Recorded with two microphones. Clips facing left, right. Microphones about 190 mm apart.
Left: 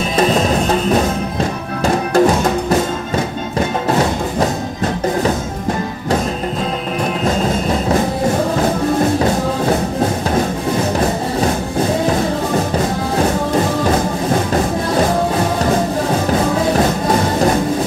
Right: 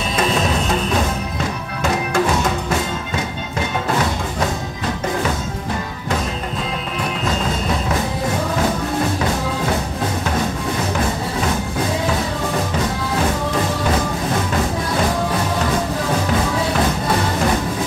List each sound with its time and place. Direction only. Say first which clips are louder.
1.8 s music: left 6 dB; 35° left (ahead or behind)